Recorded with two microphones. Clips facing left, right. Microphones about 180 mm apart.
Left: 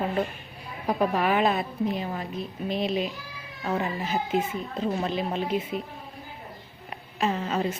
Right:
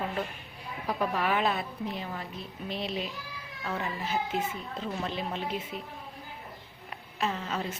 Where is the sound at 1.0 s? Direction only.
15° left (ahead or behind).